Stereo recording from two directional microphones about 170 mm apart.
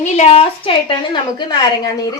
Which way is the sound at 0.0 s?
40° left (ahead or behind).